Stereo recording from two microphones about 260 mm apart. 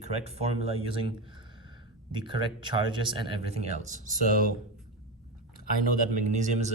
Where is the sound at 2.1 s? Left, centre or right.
Centre.